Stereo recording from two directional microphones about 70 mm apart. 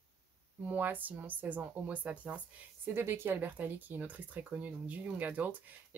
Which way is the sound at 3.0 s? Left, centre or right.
Right.